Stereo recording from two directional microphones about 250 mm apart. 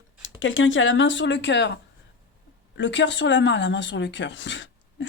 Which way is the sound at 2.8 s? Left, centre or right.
Left.